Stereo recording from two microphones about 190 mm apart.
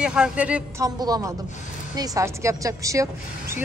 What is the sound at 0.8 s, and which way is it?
A woman's voice, 20° right (ahead or behind).